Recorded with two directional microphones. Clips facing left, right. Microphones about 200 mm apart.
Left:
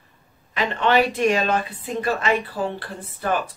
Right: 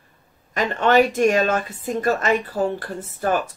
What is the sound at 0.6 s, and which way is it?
A woman's voice, 45° right (ahead or behind).